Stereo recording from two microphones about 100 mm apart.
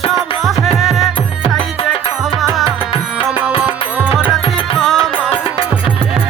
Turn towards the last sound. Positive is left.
turn(degrees=5)  # may be behind; listen again after turning